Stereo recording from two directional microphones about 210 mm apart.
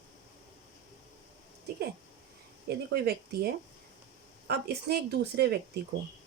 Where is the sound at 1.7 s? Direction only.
50° right (ahead or behind).